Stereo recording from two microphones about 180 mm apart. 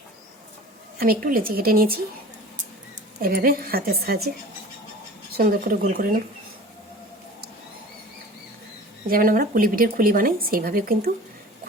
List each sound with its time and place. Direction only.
0.9 s speech: 55° right (ahead or behind)
3.2 s a woman's voice: 55° right (ahead or behind)
5.4 s speech: 55° right (ahead or behind)
9.0 s speech: 50° right (ahead or behind)